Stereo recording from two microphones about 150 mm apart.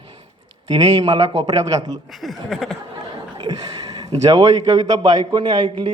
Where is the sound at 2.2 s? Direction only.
Centre (ahead or behind).